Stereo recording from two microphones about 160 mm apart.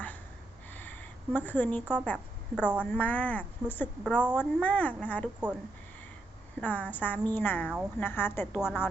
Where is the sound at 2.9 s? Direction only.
10° left (ahead or behind).